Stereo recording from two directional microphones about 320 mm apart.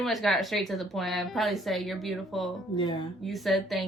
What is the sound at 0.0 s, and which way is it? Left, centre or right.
A woman's voice, centre.